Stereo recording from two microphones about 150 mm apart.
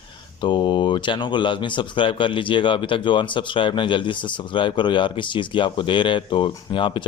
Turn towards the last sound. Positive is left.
turn(degrees=35)  # may be behind; listen again after turning